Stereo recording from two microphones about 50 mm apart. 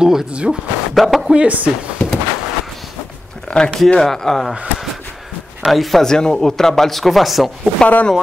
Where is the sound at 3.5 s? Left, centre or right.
Centre.